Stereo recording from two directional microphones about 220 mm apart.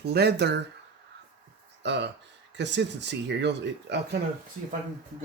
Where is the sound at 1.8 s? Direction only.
50° right (ahead or behind).